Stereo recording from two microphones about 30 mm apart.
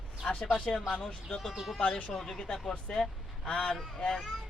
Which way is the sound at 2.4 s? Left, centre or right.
Centre.